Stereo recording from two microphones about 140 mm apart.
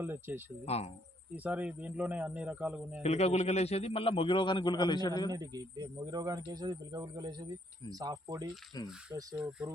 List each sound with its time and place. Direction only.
0.0 s speech: 15° right (ahead or behind)
0.6 s speech: 50° left (ahead or behind)
1.5 s speech: 10° right (ahead or behind)
3.0 s a man's voice: 50° left (ahead or behind); by 5.3 s 30° left (ahead or behind)
5.3 s speech: 25° right (ahead or behind)
9.4 s speech: 5° right (ahead or behind)